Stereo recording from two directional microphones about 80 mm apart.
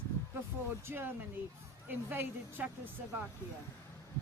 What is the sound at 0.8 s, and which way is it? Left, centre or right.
A woman's voice, right.